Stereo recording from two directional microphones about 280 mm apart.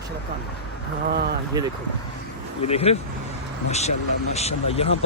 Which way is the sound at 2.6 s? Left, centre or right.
Left.